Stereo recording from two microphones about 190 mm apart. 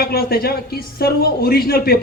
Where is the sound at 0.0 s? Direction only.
55° left (ahead or behind).